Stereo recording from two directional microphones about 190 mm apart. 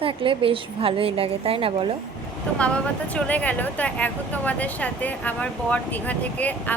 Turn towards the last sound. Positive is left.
turn(degrees=10)  # may be behind; listen again after turning